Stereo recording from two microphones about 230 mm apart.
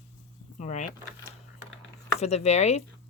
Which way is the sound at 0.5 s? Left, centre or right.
Left.